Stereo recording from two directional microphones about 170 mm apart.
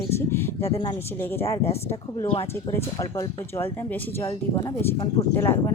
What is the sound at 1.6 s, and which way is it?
Speech, 35° left (ahead or behind).